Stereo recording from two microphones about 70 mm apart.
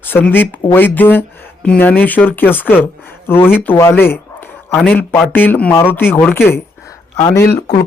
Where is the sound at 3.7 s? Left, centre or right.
Left.